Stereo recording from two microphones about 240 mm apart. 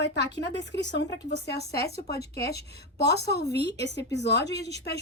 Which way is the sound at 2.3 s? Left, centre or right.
Left.